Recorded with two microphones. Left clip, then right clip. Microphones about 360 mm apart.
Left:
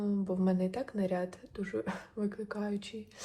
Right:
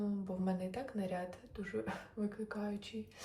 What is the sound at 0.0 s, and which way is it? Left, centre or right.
Speech, left.